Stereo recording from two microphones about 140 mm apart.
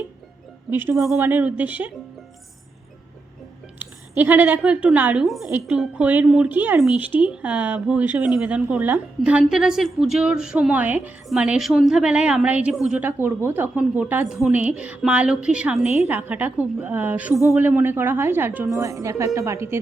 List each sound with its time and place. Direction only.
0.7 s speech: 15° right (ahead or behind)
3.8 s a woman's voice: 15° right (ahead or behind)